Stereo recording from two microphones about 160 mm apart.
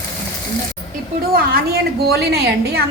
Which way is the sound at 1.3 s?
75° right (ahead or behind).